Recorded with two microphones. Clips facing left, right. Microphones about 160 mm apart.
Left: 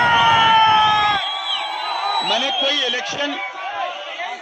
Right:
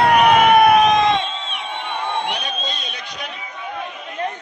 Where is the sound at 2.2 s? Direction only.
90° left.